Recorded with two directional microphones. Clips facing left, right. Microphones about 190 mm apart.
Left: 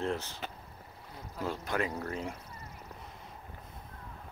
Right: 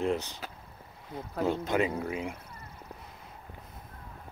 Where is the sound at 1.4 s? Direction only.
20° right (ahead or behind).